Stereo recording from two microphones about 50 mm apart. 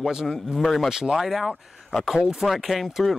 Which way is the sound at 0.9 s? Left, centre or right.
Centre.